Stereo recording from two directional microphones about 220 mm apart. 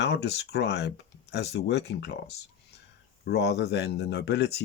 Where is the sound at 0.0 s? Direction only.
50° left (ahead or behind).